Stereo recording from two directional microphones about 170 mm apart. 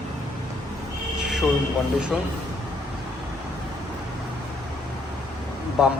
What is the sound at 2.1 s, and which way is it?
Speech, centre (ahead or behind).